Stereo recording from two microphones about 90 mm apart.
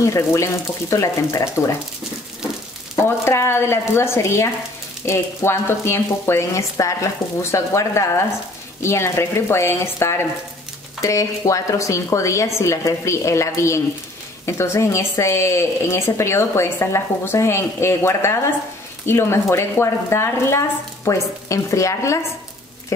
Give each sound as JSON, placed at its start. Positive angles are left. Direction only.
{"t": 0.0, "sound": "speech", "side_deg": 35}
{"t": 3.3, "sound": "speech", "side_deg": 30}